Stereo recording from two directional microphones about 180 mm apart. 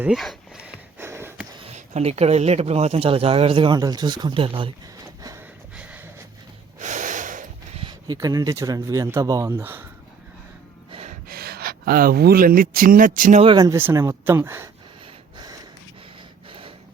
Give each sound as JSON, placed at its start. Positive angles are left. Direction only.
{"t": 0.0, "sound": "speech", "side_deg": 0}
{"t": 0.9, "sound": "a sound", "side_deg": -15}
{"t": 1.5, "sound": "speech", "side_deg": -35}
{"t": 5.7, "sound": "a sound", "side_deg": -5}
{"t": 6.7, "sound": "gasp", "side_deg": -45}
{"t": 7.8, "sound": "speech", "side_deg": -25}
{"t": 10.9, "sound": "gasp", "side_deg": -35}
{"t": 11.3, "sound": "speech", "side_deg": -60}
{"t": 13.4, "sound": "speech", "side_deg": -25}
{"t": 13.7, "sound": "speech", "side_deg": -15}
{"t": 16.5, "sound": "a sound", "side_deg": -30}